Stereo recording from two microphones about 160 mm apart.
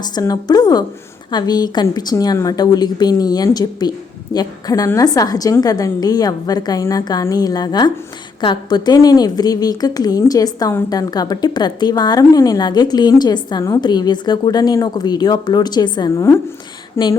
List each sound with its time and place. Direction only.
0.0 s a woman's voice: 25° left (ahead or behind)